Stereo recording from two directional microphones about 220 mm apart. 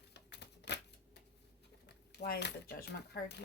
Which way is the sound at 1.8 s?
50° left (ahead or behind).